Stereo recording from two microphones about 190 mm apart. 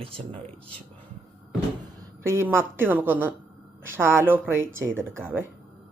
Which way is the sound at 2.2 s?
15° right (ahead or behind).